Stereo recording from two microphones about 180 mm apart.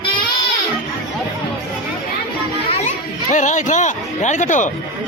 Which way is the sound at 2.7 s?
40° left (ahead or behind).